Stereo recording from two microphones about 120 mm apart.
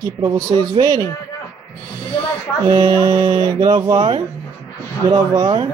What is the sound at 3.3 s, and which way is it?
A man's voice, 40° right (ahead or behind).